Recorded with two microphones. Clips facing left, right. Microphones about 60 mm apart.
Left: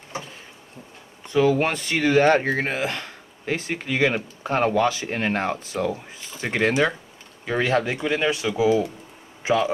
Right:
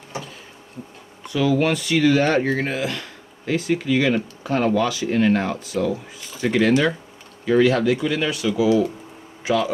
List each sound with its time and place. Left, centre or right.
1.2 s a man's voice: left